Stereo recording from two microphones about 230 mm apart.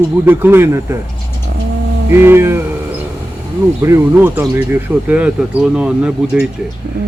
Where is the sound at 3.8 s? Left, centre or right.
Centre.